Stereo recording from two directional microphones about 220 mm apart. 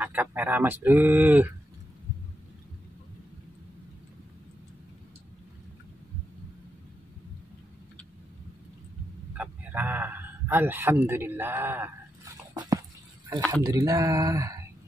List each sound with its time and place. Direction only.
0.0 s speech: 10° right (ahead or behind)
9.3 s a sound: 5° right (ahead or behind)
13.5 s speech: 15° right (ahead or behind)